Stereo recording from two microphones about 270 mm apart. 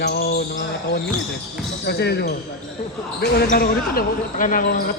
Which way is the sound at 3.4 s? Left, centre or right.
Left.